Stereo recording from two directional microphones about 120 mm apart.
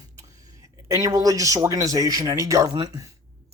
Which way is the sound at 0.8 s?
30° right (ahead or behind).